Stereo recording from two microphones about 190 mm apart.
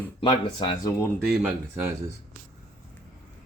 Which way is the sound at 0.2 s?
25° left (ahead or behind).